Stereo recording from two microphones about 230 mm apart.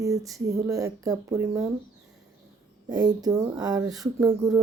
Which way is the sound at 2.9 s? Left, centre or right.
Centre.